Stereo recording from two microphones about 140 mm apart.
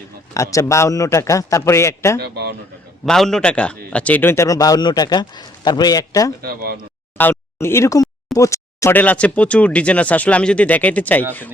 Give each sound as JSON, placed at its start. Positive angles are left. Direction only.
{"t": 0.3, "sound": "a man's voice", "side_deg": 20}
{"t": 3.1, "sound": "a man's voice", "side_deg": 5}
{"t": 6.4, "sound": "speech", "side_deg": -90}
{"t": 7.2, "sound": "speech", "side_deg": 15}